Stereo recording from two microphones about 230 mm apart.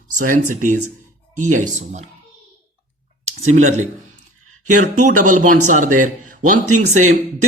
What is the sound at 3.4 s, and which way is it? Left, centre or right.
Speech, right.